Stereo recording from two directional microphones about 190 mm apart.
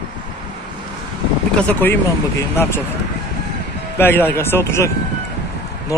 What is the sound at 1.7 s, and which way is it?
Speech, 10° left (ahead or behind).